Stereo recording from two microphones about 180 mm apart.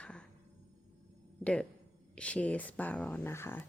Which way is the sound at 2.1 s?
5° left (ahead or behind).